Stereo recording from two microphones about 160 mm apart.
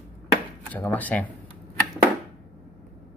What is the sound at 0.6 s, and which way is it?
Speech, 10° left (ahead or behind).